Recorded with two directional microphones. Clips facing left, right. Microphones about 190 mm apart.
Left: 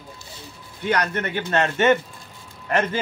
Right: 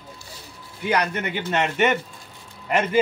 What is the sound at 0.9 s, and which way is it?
A man's voice, 10° right (ahead or behind).